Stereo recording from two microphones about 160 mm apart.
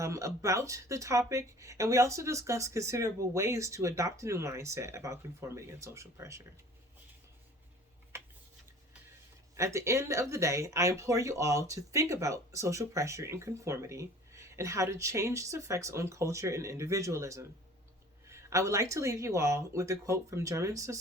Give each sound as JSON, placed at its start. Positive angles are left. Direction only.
{"t": 0.0, "sound": "speech", "side_deg": -20}
{"t": 9.6, "sound": "speech", "side_deg": -20}